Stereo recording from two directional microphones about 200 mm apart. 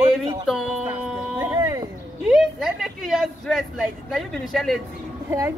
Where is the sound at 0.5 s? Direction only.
Centre (ahead or behind).